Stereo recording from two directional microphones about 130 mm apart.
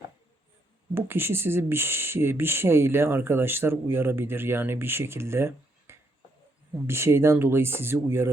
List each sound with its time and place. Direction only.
0.9 s speech: 15° right (ahead or behind)